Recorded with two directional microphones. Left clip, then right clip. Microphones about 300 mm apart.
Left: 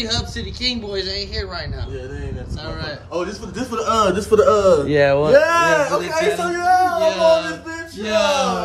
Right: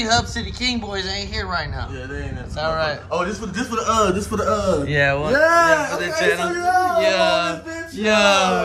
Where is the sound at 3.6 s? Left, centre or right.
Left.